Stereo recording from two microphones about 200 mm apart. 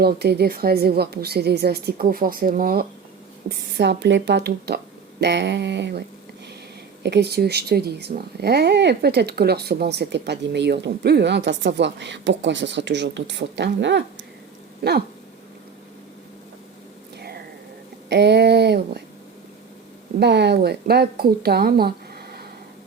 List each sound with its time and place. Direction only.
0.0 s a woman's voice: 55° right (ahead or behind)
3.5 s a woman's voice: 55° right (ahead or behind)
17.2 s a sound: 55° right (ahead or behind)
18.1 s speech: 55° right (ahead or behind)
20.1 s a woman's voice: 55° right (ahead or behind)